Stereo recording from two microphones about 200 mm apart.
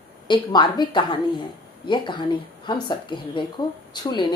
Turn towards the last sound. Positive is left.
turn(degrees=20)  # may be behind; listen again after turning